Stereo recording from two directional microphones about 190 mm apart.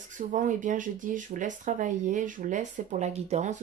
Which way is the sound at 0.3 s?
45° right (ahead or behind).